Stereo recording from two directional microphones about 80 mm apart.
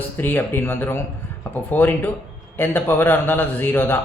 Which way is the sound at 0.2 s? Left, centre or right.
Left.